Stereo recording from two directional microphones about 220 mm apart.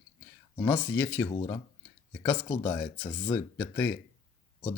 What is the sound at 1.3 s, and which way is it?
Speech, 20° left (ahead or behind).